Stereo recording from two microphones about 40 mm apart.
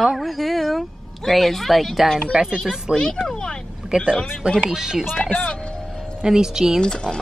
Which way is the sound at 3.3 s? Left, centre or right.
Centre.